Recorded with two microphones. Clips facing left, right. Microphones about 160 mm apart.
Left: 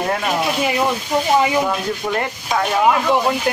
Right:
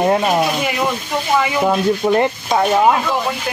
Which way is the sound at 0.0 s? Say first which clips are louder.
Right 6 dB; 25° right (ahead or behind).